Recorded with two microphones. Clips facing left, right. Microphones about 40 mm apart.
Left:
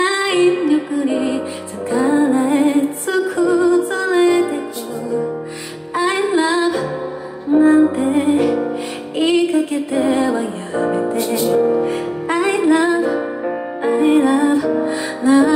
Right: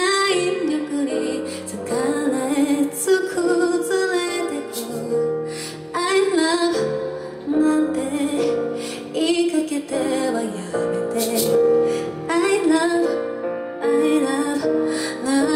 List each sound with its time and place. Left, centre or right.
0.0 s music: left
5.9 s music: left
11.1 s music: centre
11.5 s music: left